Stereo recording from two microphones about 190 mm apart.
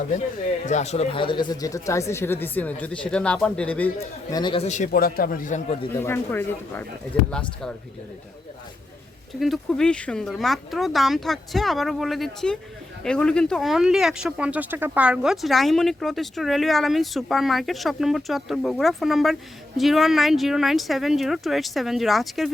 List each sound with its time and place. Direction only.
0.6 s speech: 40° left (ahead or behind); by 3.9 s 5° left (ahead or behind)
4.3 s speech: 20° left (ahead or behind)
4.9 s a man's voice: 50° left (ahead or behind); by 5.9 s 35° left (ahead or behind)
5.9 s speech: 10° left (ahead or behind)
9.4 s speech: centre (ahead or behind)